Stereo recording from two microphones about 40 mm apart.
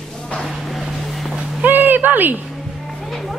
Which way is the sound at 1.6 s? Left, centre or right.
Right.